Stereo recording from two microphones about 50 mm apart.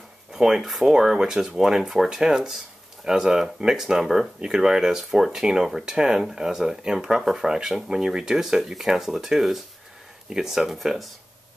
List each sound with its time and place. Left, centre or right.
0.3 s speech: centre
7.2 s speech: centre